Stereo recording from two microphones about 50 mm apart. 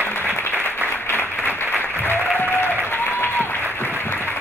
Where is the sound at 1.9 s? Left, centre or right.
Left.